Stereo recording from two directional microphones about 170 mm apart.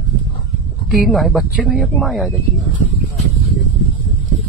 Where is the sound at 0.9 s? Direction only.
Centre (ahead or behind).